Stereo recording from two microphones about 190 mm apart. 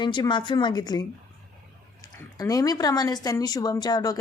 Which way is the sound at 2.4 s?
20° left (ahead or behind).